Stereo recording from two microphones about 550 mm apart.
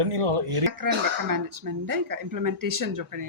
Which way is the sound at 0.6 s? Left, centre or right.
Right.